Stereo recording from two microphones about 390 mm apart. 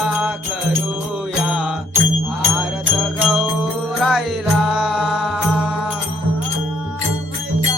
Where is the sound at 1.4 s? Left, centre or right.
Centre.